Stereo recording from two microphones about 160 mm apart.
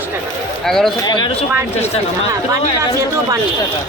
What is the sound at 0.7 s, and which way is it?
Speech, centre (ahead or behind).